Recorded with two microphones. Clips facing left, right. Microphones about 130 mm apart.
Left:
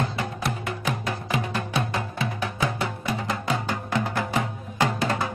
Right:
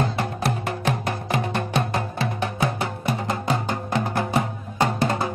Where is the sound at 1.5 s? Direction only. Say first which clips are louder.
Right 3 dB; 60° right (ahead or behind).